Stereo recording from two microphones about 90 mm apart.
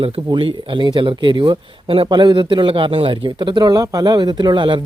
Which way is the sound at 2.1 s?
60° right (ahead or behind).